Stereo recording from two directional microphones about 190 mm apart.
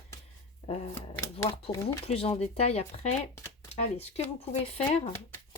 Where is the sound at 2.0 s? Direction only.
30° left (ahead or behind).